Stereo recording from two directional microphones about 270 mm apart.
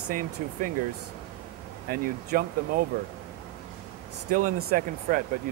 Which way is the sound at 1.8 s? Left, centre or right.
Right.